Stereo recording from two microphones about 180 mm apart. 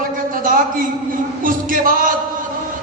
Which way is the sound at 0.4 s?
50° right (ahead or behind).